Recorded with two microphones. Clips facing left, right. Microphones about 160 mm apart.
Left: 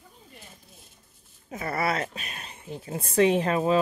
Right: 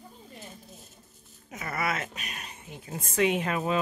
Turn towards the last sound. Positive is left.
turn(degrees=35)  # may be behind; listen again after turning